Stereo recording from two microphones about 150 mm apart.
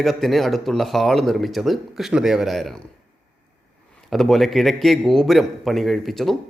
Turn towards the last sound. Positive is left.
turn(degrees=0)  # may be behind; listen again after turning